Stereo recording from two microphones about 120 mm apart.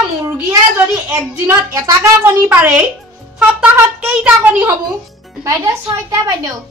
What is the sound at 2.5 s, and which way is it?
A woman's voice, 10° right (ahead or behind).